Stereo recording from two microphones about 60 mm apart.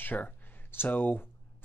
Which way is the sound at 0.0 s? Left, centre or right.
Left.